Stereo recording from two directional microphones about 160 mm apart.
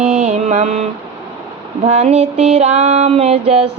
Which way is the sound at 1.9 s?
40° right (ahead or behind).